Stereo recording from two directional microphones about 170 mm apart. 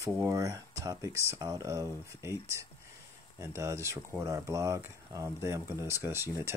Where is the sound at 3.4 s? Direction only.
15° right (ahead or behind).